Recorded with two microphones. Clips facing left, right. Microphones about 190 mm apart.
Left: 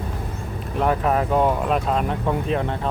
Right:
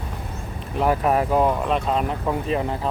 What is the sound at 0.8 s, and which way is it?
Speech, 5° right (ahead or behind).